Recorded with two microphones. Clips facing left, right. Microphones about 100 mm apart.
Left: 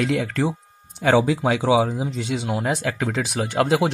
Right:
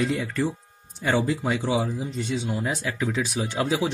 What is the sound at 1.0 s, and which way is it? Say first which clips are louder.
Speech: left 6 dB; 80° left.